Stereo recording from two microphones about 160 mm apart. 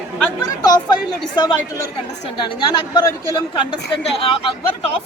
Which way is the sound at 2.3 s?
30° left (ahead or behind).